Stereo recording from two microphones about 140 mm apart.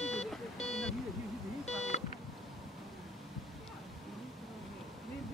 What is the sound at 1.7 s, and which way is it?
Beep, 50° left (ahead or behind).